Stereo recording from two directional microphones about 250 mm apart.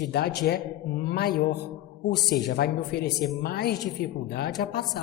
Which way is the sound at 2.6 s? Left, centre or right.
Left.